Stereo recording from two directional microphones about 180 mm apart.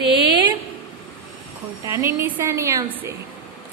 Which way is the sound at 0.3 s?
25° right (ahead or behind).